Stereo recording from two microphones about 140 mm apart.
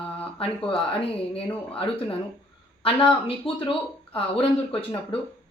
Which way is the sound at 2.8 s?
40° left (ahead or behind).